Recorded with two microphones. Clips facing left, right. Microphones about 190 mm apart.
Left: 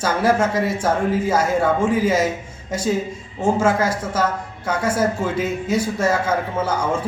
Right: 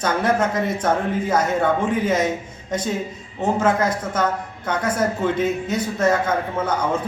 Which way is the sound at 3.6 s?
5° left (ahead or behind).